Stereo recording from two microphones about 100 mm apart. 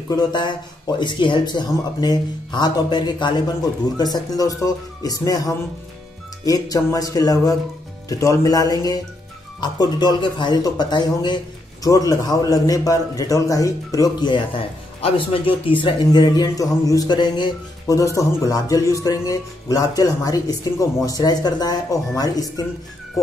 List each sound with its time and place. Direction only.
0.1 s speech: 45° left (ahead or behind)
14.2 s speech: 50° left (ahead or behind)
15.0 s speech: 65° left (ahead or behind)
16.0 s speech: 45° left (ahead or behind)
17.8 s speech: 35° left (ahead or behind)